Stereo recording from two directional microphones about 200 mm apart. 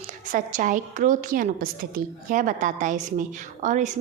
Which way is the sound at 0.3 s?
40° right (ahead or behind).